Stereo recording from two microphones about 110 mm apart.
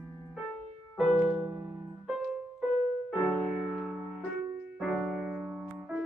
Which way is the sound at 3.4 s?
Centre (ahead or behind).